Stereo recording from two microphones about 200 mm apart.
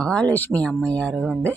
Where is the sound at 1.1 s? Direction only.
10° right (ahead or behind).